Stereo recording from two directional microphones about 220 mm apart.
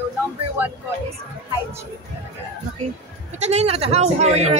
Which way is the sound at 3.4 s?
30° right (ahead or behind).